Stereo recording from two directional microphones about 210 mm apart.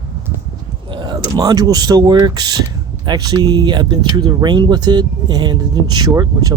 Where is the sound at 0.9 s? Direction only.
20° right (ahead or behind).